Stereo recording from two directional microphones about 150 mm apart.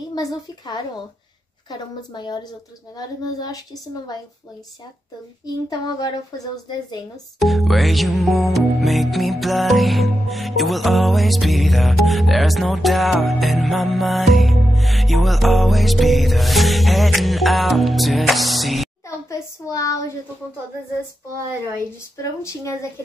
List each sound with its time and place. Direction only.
0.1 s a woman's voice: 25° left (ahead or behind)
5.7 s a woman's voice: 25° left (ahead or behind)
7.3 s music: centre (ahead or behind)
19.0 s a woman's voice: 20° left (ahead or behind)
22.1 s a woman's voice: 20° left (ahead or behind)